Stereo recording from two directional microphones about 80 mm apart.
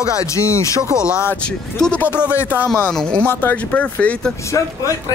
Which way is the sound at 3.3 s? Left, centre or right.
Left.